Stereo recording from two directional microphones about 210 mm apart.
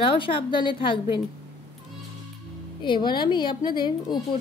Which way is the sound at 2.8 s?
20° left (ahead or behind).